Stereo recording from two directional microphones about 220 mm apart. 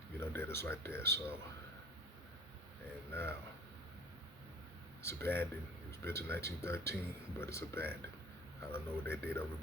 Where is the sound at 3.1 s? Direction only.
10° left (ahead or behind).